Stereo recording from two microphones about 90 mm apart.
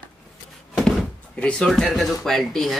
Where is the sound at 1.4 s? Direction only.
10° left (ahead or behind).